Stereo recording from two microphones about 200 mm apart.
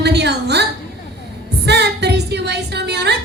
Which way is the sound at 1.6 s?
55° right (ahead or behind).